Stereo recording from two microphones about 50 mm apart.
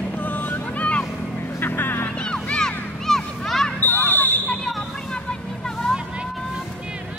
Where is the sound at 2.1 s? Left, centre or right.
Centre.